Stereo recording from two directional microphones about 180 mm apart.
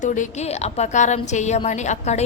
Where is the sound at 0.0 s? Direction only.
45° left (ahead or behind).